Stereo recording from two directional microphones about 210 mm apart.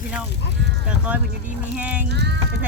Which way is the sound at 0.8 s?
5° right (ahead or behind).